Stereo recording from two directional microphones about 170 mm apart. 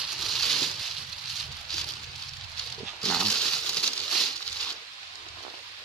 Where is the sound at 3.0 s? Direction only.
5° left (ahead or behind).